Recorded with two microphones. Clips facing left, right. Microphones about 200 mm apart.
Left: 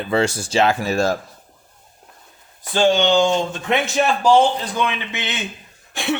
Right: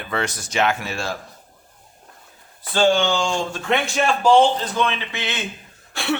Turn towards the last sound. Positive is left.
turn(degrees=20)  # may be behind; listen again after turning